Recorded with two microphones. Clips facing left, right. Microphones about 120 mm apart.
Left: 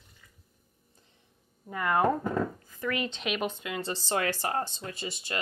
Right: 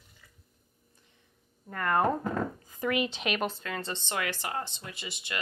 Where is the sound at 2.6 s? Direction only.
15° right (ahead or behind).